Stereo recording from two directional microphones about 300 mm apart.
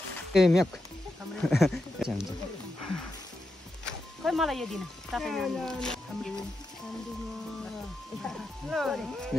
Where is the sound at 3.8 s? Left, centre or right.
Centre.